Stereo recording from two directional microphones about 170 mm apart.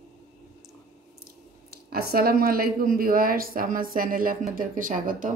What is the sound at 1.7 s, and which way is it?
A woman's voice, 65° right (ahead or behind).